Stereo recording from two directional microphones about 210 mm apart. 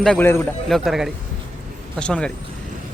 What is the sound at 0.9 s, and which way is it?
Speech, centre (ahead or behind).